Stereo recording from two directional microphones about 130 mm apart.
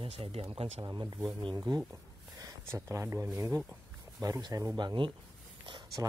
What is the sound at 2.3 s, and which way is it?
Speech, 25° right (ahead or behind).